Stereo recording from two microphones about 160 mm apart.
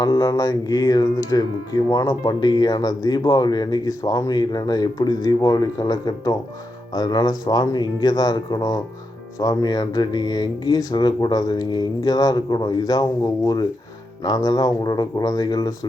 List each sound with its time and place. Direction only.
0.0 s speech: 25° left (ahead or behind)